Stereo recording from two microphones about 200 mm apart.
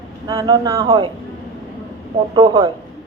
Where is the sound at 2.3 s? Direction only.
25° right (ahead or behind).